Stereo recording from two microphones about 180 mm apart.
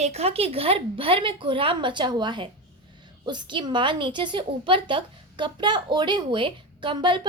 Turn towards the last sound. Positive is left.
turn(degrees=-25)  # may be behind; listen again after turning